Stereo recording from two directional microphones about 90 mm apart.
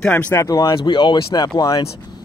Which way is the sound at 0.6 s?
65° left (ahead or behind).